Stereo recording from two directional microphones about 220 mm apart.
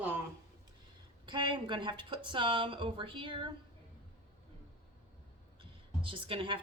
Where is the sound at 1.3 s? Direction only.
20° right (ahead or behind).